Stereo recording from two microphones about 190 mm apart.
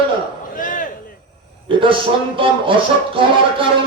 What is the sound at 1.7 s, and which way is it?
Speech, 25° right (ahead or behind).